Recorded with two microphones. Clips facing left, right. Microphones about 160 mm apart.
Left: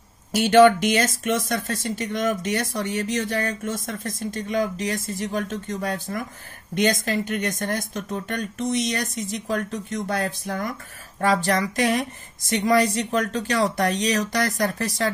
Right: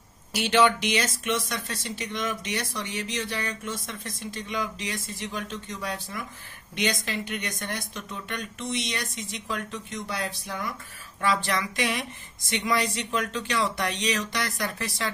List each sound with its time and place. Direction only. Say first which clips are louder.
0.3 s a woman's voice: left 8 dB; 45° left (ahead or behind)